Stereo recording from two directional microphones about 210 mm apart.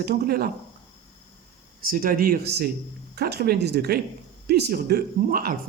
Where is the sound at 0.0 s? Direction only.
45° right (ahead or behind).